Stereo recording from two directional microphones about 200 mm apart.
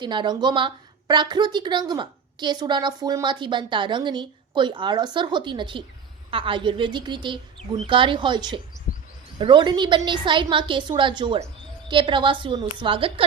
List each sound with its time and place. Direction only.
0.0 s a woman's voice: 25° right (ahead or behind)